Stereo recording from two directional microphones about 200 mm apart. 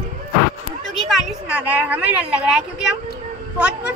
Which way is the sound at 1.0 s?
5° right (ahead or behind).